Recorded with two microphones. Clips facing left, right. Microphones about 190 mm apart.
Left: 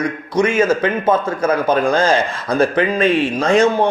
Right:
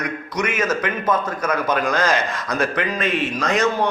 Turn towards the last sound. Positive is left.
turn(degrees=30)  # may be behind; listen again after turning